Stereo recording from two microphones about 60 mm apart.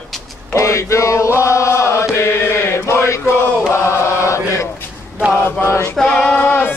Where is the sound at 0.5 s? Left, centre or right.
Left.